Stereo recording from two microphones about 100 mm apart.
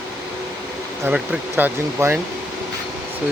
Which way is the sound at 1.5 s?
20° right (ahead or behind).